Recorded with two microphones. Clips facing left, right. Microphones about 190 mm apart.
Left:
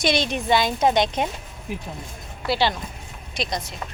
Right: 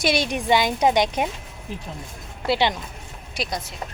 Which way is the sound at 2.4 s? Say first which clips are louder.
Right 1 dB; 20° right (ahead or behind).